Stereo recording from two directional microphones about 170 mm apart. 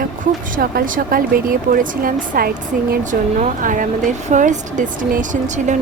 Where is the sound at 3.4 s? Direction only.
50° right (ahead or behind).